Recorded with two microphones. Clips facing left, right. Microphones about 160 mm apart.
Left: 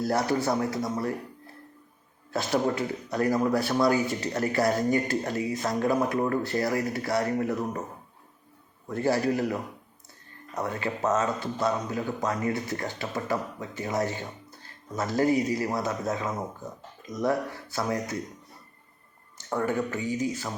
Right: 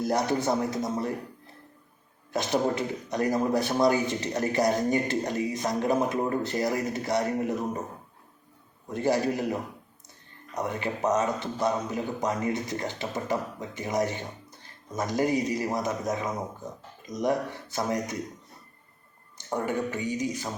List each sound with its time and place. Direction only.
0.0 s a man's voice: 20° right (ahead or behind)
2.3 s a man's voice: 20° right (ahead or behind)
8.9 s a man's voice: 20° right (ahead or behind)
19.4 s a man's voice: 20° right (ahead or behind)